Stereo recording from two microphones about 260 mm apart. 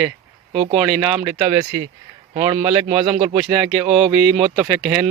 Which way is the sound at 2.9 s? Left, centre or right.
Centre.